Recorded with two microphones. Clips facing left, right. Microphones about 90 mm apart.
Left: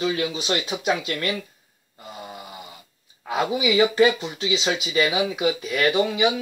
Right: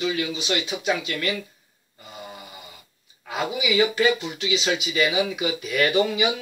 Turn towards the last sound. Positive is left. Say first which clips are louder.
# left 1 dB
turn(degrees=20)  # may be behind; listen again after turning